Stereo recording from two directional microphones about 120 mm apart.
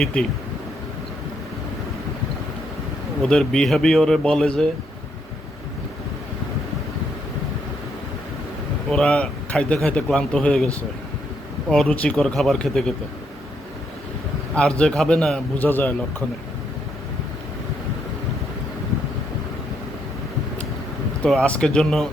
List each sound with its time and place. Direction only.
0.0 s a man's voice: 5° left (ahead or behind)
3.2 s a man's voice: 5° left (ahead or behind)
8.9 s a man's voice: 5° left (ahead or behind)
11.7 s a man's voice: 10° left (ahead or behind)
14.5 s a man's voice: 5° left (ahead or behind)
15.5 s a man's voice: 15° left (ahead or behind)
21.2 s a man's voice: 5° left (ahead or behind)